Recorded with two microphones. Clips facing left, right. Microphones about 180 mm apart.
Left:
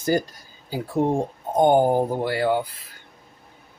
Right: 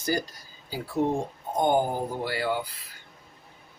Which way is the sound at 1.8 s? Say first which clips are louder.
Left 9 dB; 55° left (ahead or behind).